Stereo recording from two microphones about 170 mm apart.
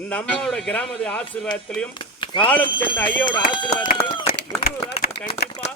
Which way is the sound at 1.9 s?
30° left (ahead or behind).